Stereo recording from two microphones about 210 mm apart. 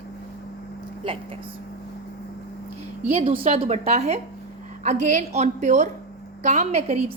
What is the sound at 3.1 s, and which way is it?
A woman's voice, 25° right (ahead or behind).